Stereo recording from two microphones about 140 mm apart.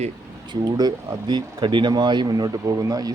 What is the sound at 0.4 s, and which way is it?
Speech, 30° right (ahead or behind).